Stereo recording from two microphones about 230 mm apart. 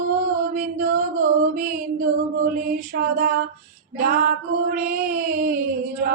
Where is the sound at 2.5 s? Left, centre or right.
Right.